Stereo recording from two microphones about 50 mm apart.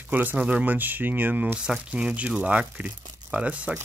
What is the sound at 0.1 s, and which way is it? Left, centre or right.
Speech, right.